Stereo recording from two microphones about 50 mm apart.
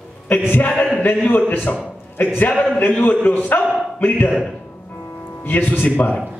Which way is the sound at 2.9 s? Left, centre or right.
Left.